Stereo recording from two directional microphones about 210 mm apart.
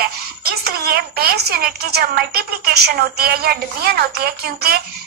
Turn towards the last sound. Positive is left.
turn(degrees=-45)  # may be behind; listen again after turning